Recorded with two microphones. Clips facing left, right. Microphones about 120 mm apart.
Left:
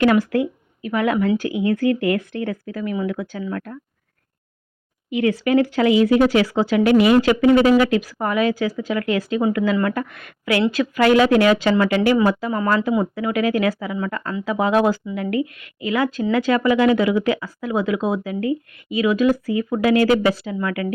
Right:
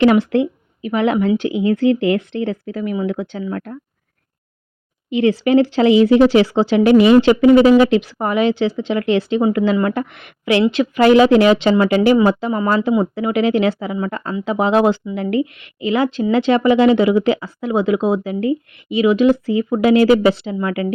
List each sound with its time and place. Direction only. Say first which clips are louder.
0.0 s a woman's voice: right 4 dB; 25° right (ahead or behind)
5.1 s a woman's voice: right 4 dB; 30° right (ahead or behind)